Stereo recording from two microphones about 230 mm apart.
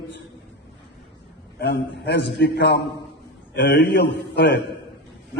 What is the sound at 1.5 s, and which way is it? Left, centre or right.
A man's voice, left.